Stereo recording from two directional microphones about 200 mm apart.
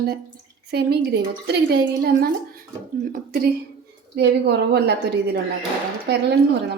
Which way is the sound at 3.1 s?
50° right (ahead or behind).